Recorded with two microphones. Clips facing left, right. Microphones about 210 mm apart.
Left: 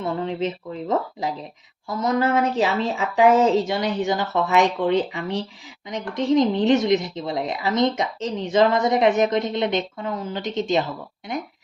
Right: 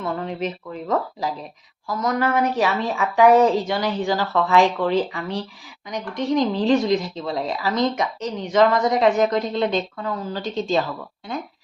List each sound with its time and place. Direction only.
0.0 s speech: 25° left (ahead or behind)